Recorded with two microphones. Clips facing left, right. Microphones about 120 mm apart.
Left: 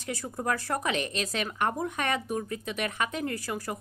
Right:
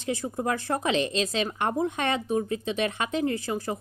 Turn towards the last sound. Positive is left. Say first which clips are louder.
# right 5 dB
turn(degrees=-20)  # may be behind; listen again after turning